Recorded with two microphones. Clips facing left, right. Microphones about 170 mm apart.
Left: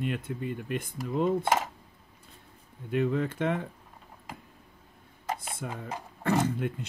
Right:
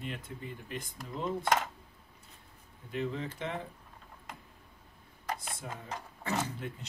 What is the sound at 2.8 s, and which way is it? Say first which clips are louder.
Speech: left 8 dB; 60° left (ahead or behind).